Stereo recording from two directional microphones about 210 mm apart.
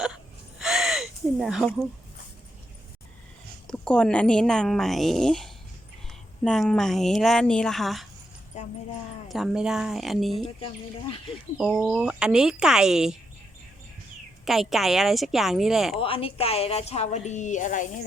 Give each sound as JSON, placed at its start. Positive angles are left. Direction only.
{"t": 0.6, "sound": "gasp", "side_deg": 0}
{"t": 3.7, "sound": "speech", "side_deg": 5}
{"t": 8.5, "sound": "a sound", "side_deg": 35}
{"t": 9.3, "sound": "speech", "side_deg": 0}
{"t": 11.5, "sound": "speech", "side_deg": -5}
{"t": 14.4, "sound": "speech", "side_deg": 0}
{"t": 16.0, "sound": "a woman's voice", "side_deg": 25}